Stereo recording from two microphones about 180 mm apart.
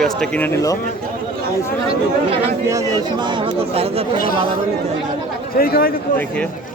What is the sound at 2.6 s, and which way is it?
Speech, 20° right (ahead or behind).